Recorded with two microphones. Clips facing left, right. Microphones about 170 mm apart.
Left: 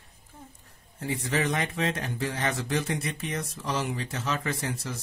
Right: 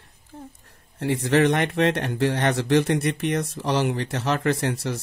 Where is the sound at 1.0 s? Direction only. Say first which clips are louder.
Right 9 dB; 70° right (ahead or behind).